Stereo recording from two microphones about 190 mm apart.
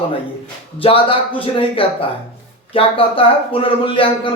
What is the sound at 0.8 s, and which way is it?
Speech, 30° left (ahead or behind).